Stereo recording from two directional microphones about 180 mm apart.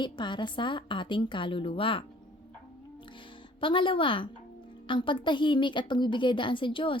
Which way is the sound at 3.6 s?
30° left (ahead or behind).